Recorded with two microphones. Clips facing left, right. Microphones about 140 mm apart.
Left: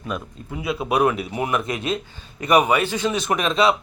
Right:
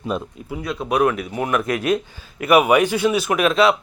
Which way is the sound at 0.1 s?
30° right (ahead or behind).